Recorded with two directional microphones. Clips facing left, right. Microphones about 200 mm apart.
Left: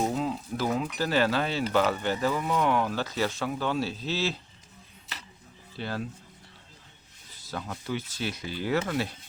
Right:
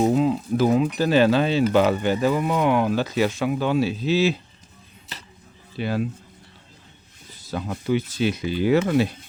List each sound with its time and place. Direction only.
0.0 s speech: 20° right (ahead or behind)
5.7 s speech: 15° right (ahead or behind)
7.5 s speech: 20° right (ahead or behind)